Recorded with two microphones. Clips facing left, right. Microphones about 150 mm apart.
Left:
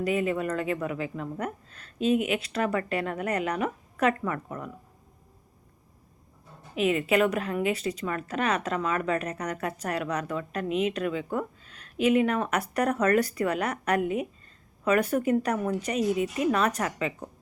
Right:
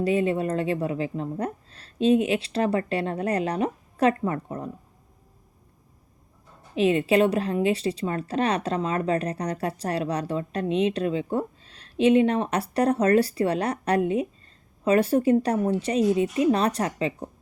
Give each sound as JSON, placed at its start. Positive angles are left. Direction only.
{"t": 0.0, "sound": "a woman's voice", "side_deg": -30}
{"t": 6.7, "sound": "a woman's voice", "side_deg": -30}